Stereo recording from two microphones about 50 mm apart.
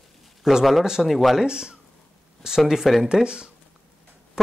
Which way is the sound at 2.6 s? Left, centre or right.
Centre.